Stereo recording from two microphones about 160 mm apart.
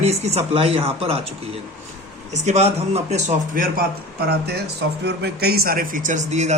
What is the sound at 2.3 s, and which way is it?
A man's voice, 45° right (ahead or behind).